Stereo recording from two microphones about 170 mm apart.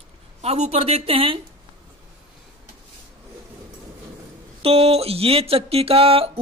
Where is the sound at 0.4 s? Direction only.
40° right (ahead or behind).